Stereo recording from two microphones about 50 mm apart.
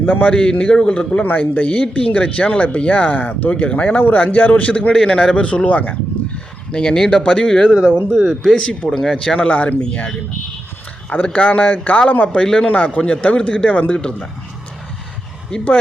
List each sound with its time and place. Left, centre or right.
0.0 s a man's voice: left
0.3 s speech: left
1.2 s a man's voice: left
1.6 s a man's voice: left
6.7 s speech: centre
8.5 s a man's voice: centre
12.4 s speech: centre
12.6 s speech: left